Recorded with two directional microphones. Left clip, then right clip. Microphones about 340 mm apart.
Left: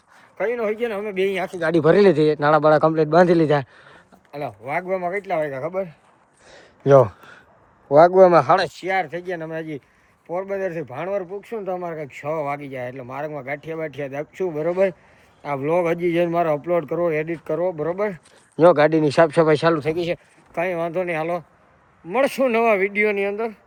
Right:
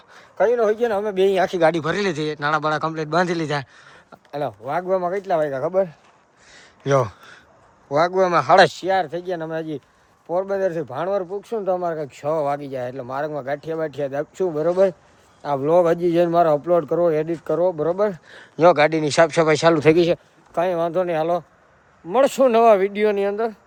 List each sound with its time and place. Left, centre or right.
0.3 s speech: centre
1.6 s a man's voice: centre
4.3 s speech: centre
6.5 s a sound: centre
7.9 s a man's voice: centre
8.6 s speech: centre
9.4 s speech: right
10.2 s speech: centre
18.5 s a man's voice: centre
19.8 s speech: right
20.5 s speech: centre
22.1 s speech: centre